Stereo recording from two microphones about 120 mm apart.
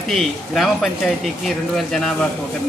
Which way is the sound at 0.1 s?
Centre (ahead or behind).